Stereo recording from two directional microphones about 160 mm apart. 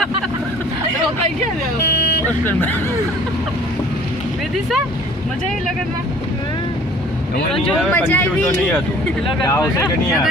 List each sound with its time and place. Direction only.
2.4 s speech: 10° left (ahead or behind)
7.9 s speech: 10° left (ahead or behind)